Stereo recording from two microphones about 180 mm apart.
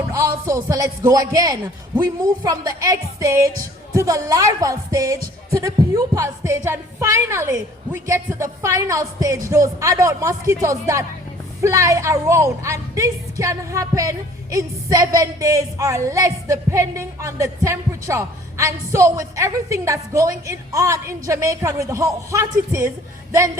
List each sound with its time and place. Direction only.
0.1 s a woman's voice: 15° right (ahead or behind)